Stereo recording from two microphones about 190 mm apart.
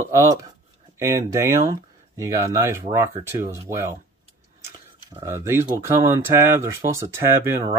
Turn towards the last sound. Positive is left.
turn(degrees=-15)  # may be behind; listen again after turning